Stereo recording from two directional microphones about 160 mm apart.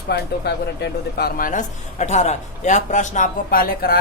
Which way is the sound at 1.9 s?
45° left (ahead or behind).